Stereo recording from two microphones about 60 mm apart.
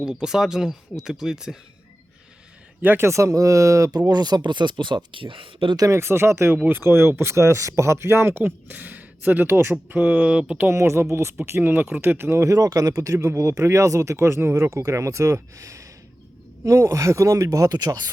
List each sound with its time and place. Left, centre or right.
0.0 s speech: centre
2.8 s speech: right
3.1 s speech: right
4.9 s speech: right
5.9 s speech: right
10.2 s speech: centre
10.7 s speech: right
12.0 s speech: right
12.4 s speech: right
13.0 s speech: right
13.3 s speech: right